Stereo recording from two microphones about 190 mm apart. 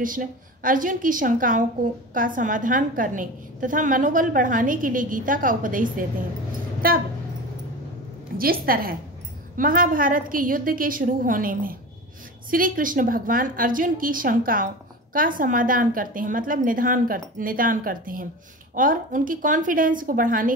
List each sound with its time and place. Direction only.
0.0 s a woman's voice: 45° right (ahead or behind)
8.4 s a woman's voice: 50° right (ahead or behind)